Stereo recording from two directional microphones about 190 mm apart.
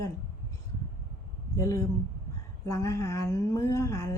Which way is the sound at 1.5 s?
15° left (ahead or behind).